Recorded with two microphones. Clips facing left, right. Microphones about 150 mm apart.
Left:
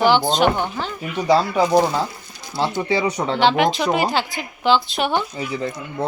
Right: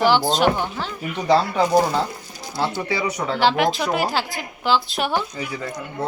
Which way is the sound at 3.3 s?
Centre (ahead or behind).